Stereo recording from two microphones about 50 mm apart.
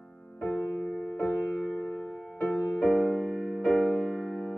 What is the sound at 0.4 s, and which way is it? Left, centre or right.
Music, left.